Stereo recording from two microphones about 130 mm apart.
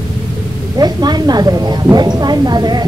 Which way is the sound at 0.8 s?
30° right (ahead or behind).